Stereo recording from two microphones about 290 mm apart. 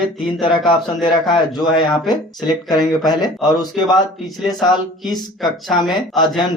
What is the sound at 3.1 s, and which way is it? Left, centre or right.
Speech, centre.